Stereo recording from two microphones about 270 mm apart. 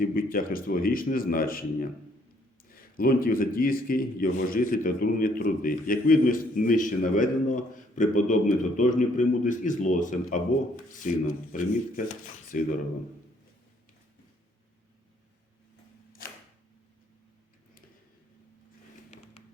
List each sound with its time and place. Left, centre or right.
0.0 s speech: left